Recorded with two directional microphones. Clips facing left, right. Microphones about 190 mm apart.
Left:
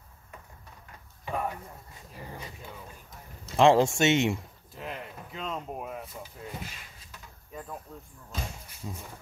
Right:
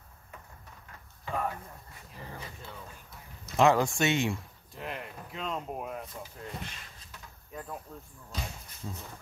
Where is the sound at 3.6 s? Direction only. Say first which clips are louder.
Left 3 dB; 25° left (ahead or behind).